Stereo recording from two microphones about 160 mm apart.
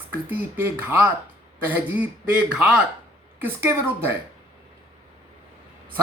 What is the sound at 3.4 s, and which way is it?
Speech, 15° right (ahead or behind).